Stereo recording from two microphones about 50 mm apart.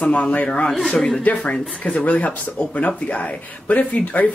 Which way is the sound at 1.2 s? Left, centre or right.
Left.